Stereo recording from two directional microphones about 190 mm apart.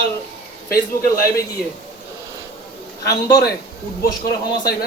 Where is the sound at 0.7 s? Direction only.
50° left (ahead or behind).